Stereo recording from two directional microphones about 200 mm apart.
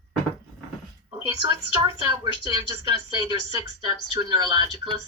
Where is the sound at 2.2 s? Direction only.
20° right (ahead or behind).